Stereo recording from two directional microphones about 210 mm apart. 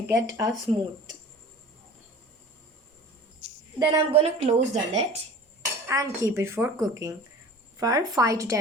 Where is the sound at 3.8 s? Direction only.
20° right (ahead or behind).